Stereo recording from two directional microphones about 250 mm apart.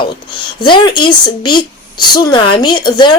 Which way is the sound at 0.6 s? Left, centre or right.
Centre.